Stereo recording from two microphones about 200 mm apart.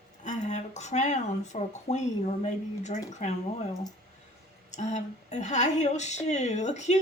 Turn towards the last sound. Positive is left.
turn(degrees=35)  # may be behind; listen again after turning